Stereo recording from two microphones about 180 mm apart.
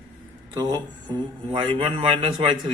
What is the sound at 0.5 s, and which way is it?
A man's voice, 25° right (ahead or behind).